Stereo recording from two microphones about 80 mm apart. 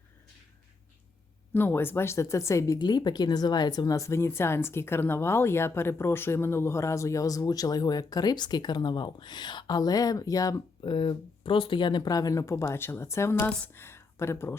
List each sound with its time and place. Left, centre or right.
1.5 s speech: left
2.7 s speech: left
10.8 s speech: left
12.1 s speech: left